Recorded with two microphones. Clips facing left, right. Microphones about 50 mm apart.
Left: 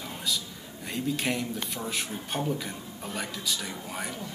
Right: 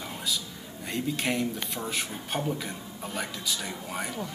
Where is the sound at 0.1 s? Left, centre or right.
Centre.